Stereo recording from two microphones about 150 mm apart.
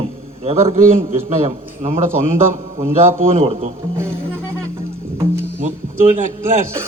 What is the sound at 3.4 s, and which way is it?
Speech, 40° right (ahead or behind).